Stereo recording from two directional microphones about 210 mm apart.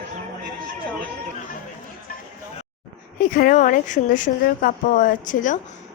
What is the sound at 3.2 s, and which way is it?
Speech, 40° left (ahead or behind).